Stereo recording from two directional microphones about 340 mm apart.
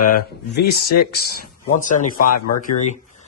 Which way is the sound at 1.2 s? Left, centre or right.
Left.